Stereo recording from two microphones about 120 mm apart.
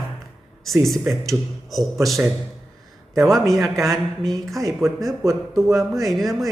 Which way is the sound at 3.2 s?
Centre (ahead or behind).